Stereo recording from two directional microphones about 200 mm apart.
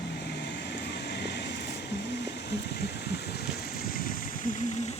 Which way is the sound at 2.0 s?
60° left (ahead or behind).